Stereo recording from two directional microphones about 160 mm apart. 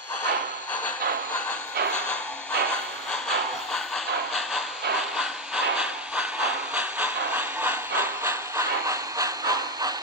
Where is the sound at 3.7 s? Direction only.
Centre (ahead or behind).